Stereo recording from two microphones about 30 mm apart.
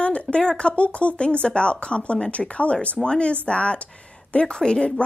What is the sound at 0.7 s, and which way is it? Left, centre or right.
Speech, left.